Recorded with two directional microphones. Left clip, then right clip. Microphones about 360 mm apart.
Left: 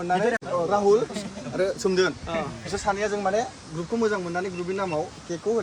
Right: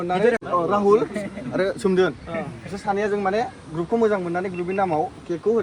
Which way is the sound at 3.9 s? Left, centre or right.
Centre.